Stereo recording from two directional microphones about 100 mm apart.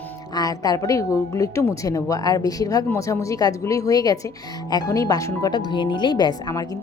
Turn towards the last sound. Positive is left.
turn(degrees=40)  # may be behind; listen again after turning